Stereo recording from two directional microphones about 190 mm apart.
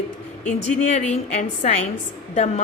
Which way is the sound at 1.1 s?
35° left (ahead or behind).